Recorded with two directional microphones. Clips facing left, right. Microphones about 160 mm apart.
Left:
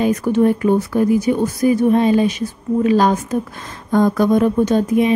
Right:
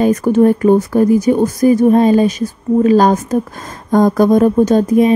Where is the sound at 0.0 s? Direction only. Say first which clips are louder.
Right 4 dB; 45° right (ahead or behind).